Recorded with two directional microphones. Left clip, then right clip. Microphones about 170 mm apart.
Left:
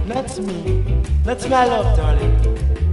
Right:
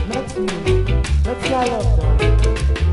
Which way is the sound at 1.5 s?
15° left (ahead or behind).